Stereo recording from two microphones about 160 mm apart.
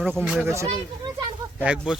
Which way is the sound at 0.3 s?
15° right (ahead or behind).